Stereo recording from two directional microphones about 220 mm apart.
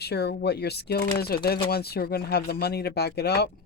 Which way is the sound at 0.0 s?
45° left (ahead or behind).